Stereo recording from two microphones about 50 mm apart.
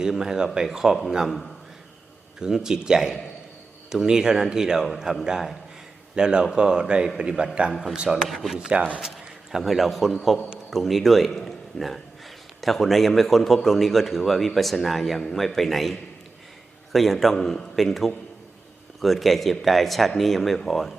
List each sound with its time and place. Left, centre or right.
0.0 s speech: centre
2.4 s a man's voice: centre
7.7 s a man's voice: centre
7.9 s speech: centre
8.3 s a man's voice: centre
8.7 s a man's voice: right
9.0 s a man's voice: centre